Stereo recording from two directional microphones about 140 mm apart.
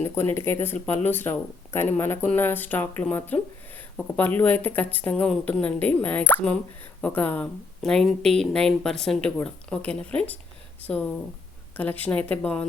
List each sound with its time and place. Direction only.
0.0 s speech: 15° left (ahead or behind)